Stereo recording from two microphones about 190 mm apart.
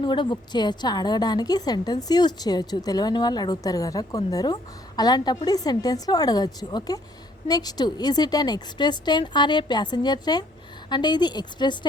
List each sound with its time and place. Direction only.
0.0 s a woman's voice: 25° left (ahead or behind)